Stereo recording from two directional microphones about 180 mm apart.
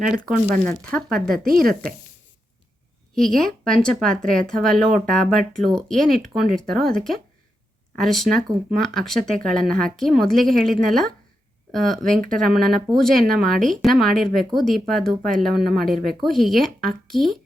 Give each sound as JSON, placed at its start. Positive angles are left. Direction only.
{"t": 0.6, "sound": "speech", "side_deg": 5}
{"t": 1.3, "sound": "speech", "side_deg": -55}
{"t": 3.2, "sound": "speech", "side_deg": 5}